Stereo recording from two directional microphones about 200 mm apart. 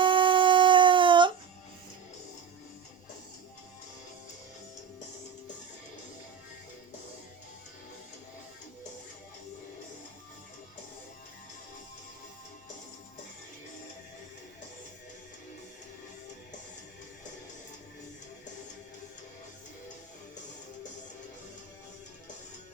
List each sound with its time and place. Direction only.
0.0 s dog: 25° right (ahead or behind)